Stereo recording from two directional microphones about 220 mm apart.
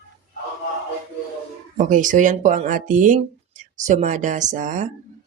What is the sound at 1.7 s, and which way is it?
Speech, 35° right (ahead or behind).